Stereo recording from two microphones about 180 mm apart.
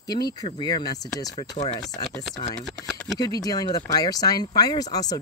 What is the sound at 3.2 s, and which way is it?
Speech, 20° left (ahead or behind).